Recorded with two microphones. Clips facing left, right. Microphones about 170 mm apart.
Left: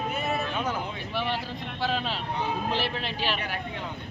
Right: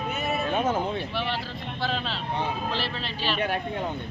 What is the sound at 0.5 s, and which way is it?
Speech, 50° right (ahead or behind).